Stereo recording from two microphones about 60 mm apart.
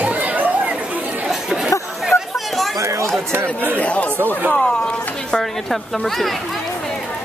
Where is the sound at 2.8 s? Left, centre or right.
Right.